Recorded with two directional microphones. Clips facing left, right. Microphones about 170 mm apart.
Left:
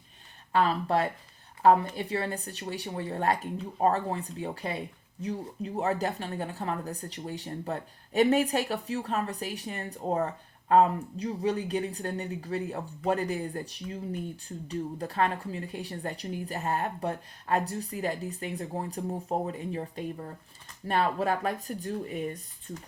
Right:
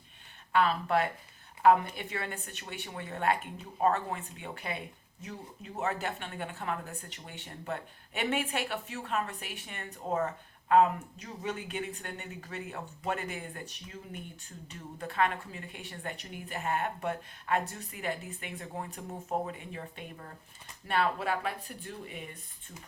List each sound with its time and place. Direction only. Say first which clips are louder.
0.5 s speech: left 2 dB; 35° left (ahead or behind)